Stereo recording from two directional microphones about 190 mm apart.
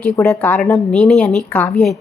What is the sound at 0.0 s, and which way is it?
A woman's voice, 10° left (ahead or behind).